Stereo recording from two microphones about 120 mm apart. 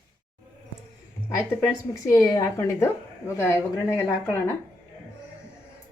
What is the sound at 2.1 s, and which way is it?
A woman's voice, 30° left (ahead or behind).